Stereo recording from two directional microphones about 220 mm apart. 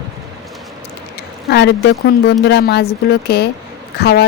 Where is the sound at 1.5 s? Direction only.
50° left (ahead or behind).